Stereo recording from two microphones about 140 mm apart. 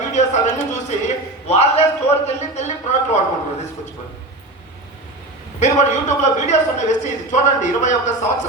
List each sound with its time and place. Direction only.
0.1 s a man's voice: 60° left (ahead or behind)
5.5 s a man's voice: 55° left (ahead or behind)